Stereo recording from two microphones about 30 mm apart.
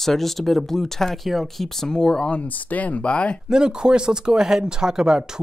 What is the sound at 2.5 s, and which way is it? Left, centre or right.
Speech, left.